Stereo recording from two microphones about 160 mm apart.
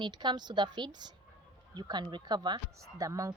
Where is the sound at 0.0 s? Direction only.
25° right (ahead or behind).